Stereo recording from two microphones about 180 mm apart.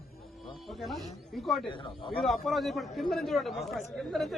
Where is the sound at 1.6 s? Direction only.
30° left (ahead or behind).